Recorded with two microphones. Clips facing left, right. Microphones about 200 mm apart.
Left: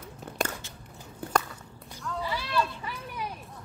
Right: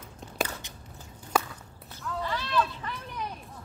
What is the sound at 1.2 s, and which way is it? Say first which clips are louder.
Walk: even; 60° left (ahead or behind).